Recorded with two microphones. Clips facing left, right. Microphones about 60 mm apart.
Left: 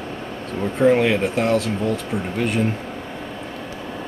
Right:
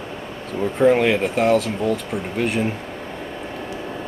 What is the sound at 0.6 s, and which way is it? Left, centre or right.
Speech, centre.